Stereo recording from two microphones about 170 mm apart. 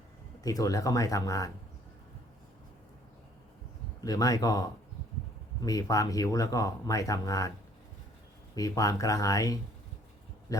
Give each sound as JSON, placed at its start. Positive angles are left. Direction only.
{"t": 0.4, "sound": "speech", "side_deg": 20}
{"t": 4.0, "sound": "speech", "side_deg": 20}
{"t": 8.5, "sound": "speech", "side_deg": 20}